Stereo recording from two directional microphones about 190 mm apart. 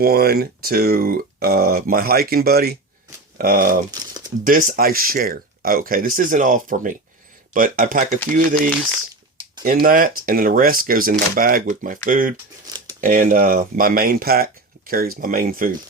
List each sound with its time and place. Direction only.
0.0 s speech: 55° right (ahead or behind)
3.9 s crumpling: 20° right (ahead or behind)
4.4 s speech: 45° right (ahead or behind)
8.2 s speech: 5° left (ahead or behind)
9.6 s speech: 45° right (ahead or behind)
12.6 s a sound: 20° right (ahead or behind)
13.0 s speech: 45° right (ahead or behind)